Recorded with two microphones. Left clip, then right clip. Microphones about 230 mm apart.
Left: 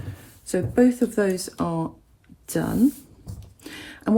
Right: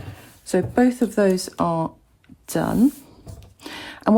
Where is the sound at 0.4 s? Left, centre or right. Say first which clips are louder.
Right 1 dB; right.